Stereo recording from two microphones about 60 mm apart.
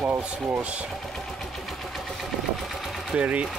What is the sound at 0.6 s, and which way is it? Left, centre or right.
Speech, right.